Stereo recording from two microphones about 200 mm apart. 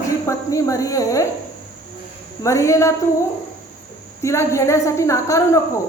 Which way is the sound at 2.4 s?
15° left (ahead or behind).